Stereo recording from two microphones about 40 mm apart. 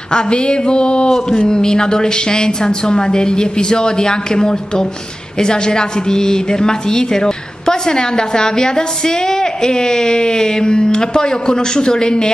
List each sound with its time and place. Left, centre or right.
0.1 s a woman's voice: left